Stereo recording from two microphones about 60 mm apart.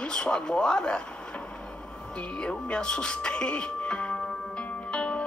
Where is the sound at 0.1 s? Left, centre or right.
Centre.